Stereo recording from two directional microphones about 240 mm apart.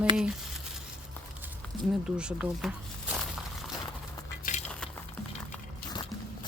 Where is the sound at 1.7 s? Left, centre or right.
Centre.